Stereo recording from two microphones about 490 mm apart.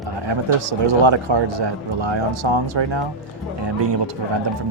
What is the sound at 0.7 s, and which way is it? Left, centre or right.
A man's voice, right.